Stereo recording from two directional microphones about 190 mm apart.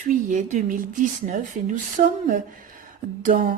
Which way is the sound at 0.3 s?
40° right (ahead or behind).